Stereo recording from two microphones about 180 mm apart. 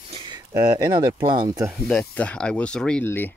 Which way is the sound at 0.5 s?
20° right (ahead or behind).